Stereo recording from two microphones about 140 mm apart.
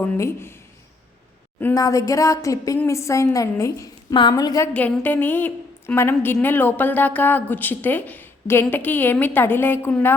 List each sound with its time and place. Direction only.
0.0 s a woman's voice: 15° left (ahead or behind)
1.7 s a woman's voice: 25° left (ahead or behind)
4.7 s a woman's voice: 15° left (ahead or behind)